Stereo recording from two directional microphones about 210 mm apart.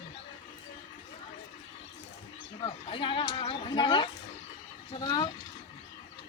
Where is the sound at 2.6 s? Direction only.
25° left (ahead or behind).